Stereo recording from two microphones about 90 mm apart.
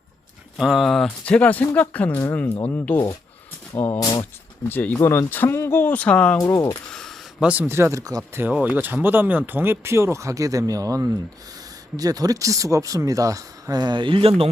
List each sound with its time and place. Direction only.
0.5 s speech: 5° right (ahead or behind)
1.0 s speech: 15° left (ahead or behind)
6.9 s a sound: 5° left (ahead or behind)
7.4 s speech: 10° right (ahead or behind)
7.7 s speech: 30° right (ahead or behind)
8.3 s speech: 25° right (ahead or behind); by 14.5 s 90° right